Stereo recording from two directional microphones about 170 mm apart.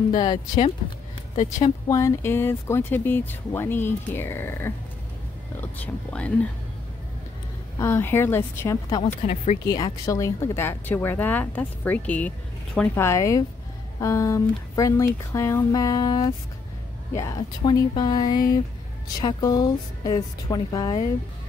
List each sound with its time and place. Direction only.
0.1 s speech: 25° left (ahead or behind)
1.3 s speech: 40° left (ahead or behind)
1.9 s speech: 20° left (ahead or behind)
7.8 s speech: 15° left (ahead or behind)
9.0 s speech: 40° left (ahead or behind)
9.7 s speech: 25° left (ahead or behind)